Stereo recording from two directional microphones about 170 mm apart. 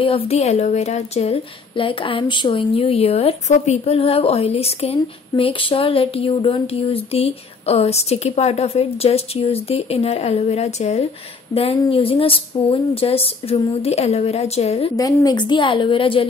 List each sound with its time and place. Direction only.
0.0 s a woman's voice: 35° left (ahead or behind)
15.0 s a woman's voice: 20° left (ahead or behind)